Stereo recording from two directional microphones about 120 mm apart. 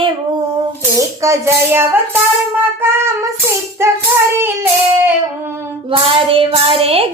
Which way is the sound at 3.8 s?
25° right (ahead or behind).